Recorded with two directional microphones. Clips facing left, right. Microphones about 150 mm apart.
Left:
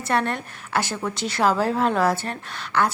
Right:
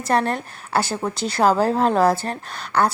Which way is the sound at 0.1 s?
35° right (ahead or behind).